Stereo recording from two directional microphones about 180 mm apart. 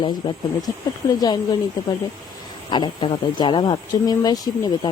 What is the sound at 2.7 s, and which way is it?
Speech, 25° left (ahead or behind).